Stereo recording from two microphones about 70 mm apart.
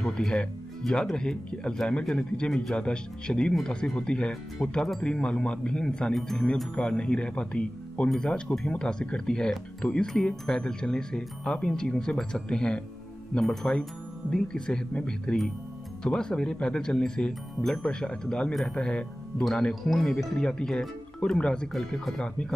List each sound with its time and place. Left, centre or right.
0.0 s speech: centre
6.7 s speech: centre
19.7 s speech: centre
20.3 s speech: centre